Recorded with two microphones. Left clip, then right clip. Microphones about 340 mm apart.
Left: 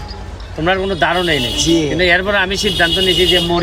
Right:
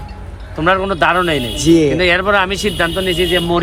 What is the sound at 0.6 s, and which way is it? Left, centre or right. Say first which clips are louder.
Speech: right 2 dB; centre.